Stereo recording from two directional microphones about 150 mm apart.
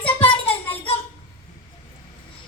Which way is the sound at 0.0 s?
40° left (ahead or behind).